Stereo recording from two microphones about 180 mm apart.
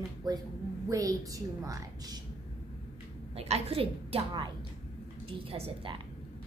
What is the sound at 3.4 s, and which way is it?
A woman's voice, 35° right (ahead or behind).